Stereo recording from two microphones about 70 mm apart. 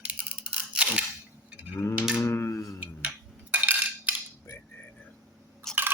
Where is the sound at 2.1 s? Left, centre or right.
Left.